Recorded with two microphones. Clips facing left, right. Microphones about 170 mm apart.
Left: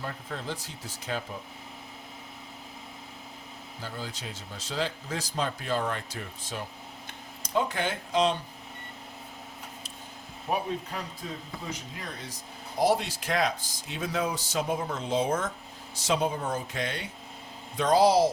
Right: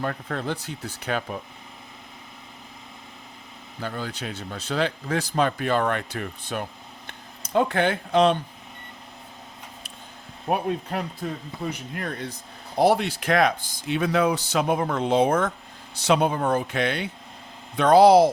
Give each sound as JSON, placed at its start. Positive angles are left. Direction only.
{"t": 0.0, "sound": "speech", "side_deg": -65}
{"t": 3.8, "sound": "speech", "side_deg": -65}
{"t": 10.5, "sound": "speech", "side_deg": -60}